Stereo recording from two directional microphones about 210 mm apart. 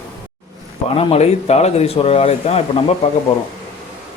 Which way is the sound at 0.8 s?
30° left (ahead or behind).